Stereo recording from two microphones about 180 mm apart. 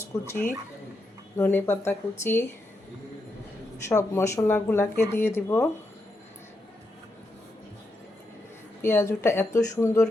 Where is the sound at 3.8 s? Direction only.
15° left (ahead or behind).